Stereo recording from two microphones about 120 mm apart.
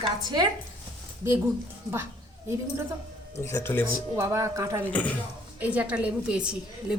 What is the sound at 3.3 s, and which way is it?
Speech, 20° left (ahead or behind).